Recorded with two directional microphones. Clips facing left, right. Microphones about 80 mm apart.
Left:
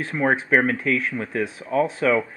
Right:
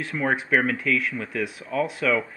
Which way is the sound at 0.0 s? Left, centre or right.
Left.